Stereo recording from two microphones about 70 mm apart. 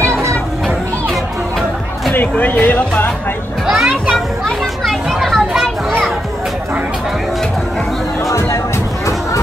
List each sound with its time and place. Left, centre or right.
0.1 s children playing: right
2.1 s speech: left
3.6 s children playing: centre
8.3 s music: left